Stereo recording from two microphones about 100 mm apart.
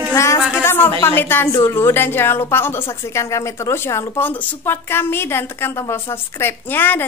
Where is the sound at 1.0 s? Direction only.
25° left (ahead or behind).